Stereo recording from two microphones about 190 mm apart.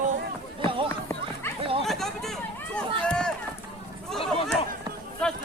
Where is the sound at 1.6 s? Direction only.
30° right (ahead or behind).